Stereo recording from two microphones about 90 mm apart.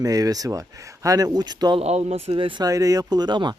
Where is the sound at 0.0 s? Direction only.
45° right (ahead or behind).